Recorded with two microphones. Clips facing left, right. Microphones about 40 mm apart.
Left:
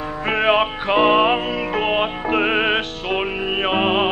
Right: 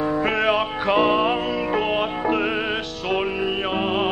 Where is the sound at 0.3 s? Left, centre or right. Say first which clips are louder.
Left 3 dB; left.